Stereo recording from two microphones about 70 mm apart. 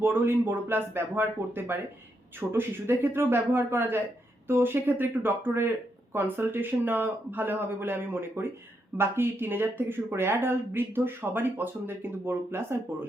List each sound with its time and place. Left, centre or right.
0.0 s speech: right